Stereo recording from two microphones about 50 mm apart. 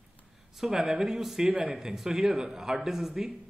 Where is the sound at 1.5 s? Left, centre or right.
Right.